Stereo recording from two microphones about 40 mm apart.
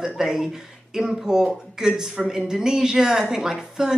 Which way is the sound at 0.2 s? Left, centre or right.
Centre.